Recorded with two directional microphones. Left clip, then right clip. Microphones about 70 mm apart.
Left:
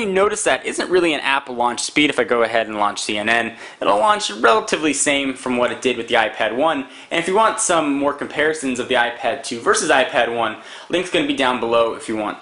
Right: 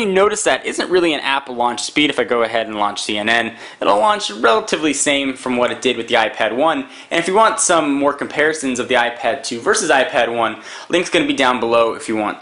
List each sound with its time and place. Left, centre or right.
0.0 s speech: centre
9.7 s speech: centre